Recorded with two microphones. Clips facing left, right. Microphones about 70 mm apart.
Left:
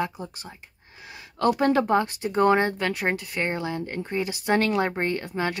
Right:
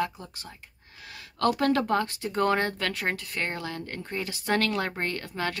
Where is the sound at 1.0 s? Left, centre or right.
Centre.